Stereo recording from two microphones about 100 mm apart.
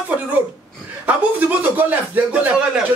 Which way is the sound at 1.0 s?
15° right (ahead or behind).